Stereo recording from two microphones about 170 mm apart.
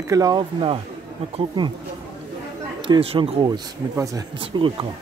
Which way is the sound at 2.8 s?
30° right (ahead or behind).